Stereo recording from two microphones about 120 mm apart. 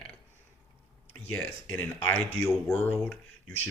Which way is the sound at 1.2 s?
15° left (ahead or behind).